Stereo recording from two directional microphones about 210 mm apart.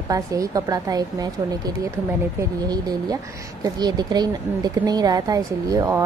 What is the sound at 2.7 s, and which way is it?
A woman's voice, 20° right (ahead or behind).